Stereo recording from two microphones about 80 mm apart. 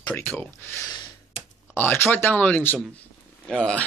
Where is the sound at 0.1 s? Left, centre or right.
Left.